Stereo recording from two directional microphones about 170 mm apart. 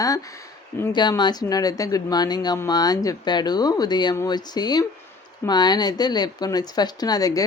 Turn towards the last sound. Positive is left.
turn(degrees=20)  # may be behind; listen again after turning